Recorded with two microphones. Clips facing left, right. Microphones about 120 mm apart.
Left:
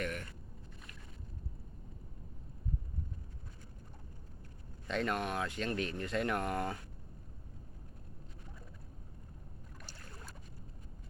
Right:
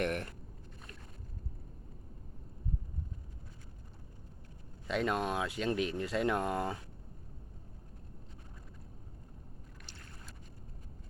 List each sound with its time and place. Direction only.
0.0 s boat: 60° right (ahead or behind)
4.9 s speech: 15° right (ahead or behind)